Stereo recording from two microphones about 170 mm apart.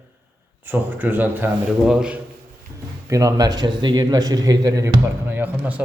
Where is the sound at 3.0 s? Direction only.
20° right (ahead or behind).